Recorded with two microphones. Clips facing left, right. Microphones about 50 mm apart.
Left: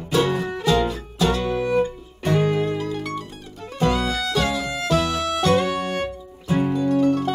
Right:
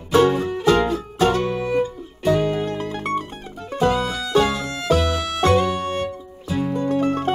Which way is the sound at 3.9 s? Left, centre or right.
Left.